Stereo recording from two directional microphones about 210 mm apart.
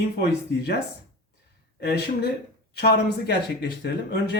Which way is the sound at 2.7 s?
50° left (ahead or behind).